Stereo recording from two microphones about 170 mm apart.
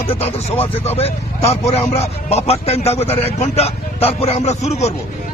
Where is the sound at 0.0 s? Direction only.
35° left (ahead or behind).